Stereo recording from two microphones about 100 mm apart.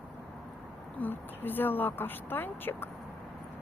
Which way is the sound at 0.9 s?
20° left (ahead or behind).